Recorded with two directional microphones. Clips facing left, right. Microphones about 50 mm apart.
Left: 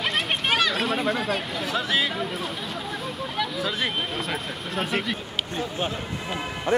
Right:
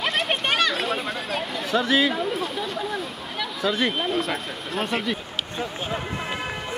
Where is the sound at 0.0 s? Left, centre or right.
Centre.